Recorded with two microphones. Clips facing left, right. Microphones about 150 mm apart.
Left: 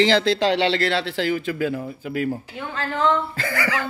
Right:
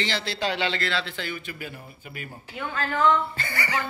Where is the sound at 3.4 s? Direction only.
90° left.